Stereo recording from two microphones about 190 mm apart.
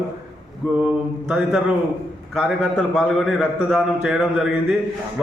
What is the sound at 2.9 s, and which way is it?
A man's voice, centre (ahead or behind).